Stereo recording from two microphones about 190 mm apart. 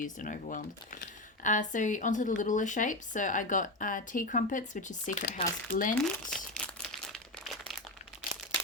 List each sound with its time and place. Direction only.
0.0 s speech: 45° left (ahead or behind)
6.3 s crumpling: 5° left (ahead or behind)